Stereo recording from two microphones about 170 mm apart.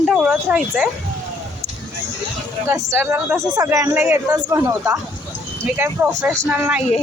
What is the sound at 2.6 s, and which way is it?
A woman's voice, 15° right (ahead or behind).